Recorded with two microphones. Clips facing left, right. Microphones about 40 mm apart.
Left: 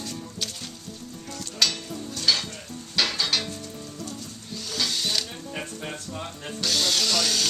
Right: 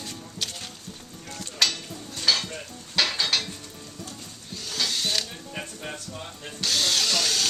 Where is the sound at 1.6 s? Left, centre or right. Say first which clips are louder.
Even; centre.